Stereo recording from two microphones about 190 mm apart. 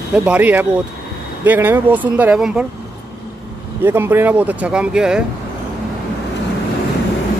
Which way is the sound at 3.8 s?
10° right (ahead or behind).